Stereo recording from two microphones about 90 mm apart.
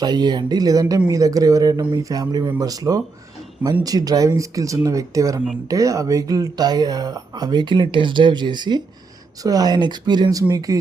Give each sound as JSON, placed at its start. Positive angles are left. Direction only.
{"t": 0.0, "sound": "speech", "side_deg": -50}
{"t": 9.4, "sound": "speech", "side_deg": -45}